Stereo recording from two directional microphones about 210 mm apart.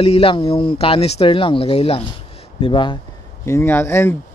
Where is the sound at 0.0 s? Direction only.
25° left (ahead or behind).